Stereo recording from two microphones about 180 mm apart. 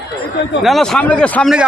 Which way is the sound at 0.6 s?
Centre (ahead or behind).